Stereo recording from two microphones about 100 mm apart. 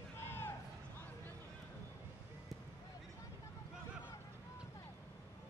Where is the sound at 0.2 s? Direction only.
25° left (ahead or behind).